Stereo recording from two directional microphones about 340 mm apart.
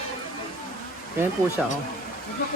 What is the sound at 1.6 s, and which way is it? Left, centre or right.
Speech, centre.